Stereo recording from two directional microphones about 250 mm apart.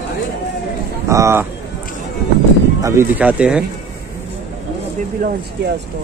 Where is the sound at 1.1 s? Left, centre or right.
Centre.